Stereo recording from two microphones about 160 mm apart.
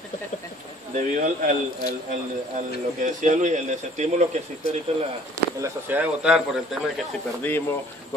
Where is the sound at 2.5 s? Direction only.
50° right (ahead or behind).